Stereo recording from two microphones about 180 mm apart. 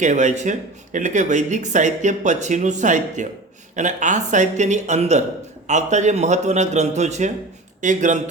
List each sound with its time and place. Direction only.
0.0 s speech: 40° right (ahead or behind)